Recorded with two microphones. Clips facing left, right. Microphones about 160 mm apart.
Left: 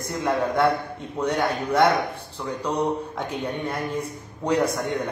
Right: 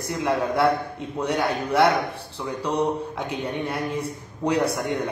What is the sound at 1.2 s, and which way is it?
A man's voice, 10° right (ahead or behind).